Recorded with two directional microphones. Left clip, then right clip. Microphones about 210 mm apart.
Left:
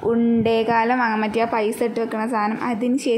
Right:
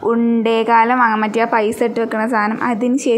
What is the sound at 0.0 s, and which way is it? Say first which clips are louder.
A woman's voice: right 3 dB; 5° right (ahead or behind).